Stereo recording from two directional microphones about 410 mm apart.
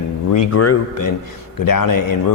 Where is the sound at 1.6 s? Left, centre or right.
Left.